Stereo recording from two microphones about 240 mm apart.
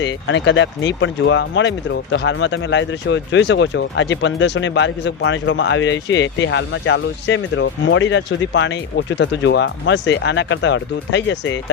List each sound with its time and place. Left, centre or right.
0.0 s speech: left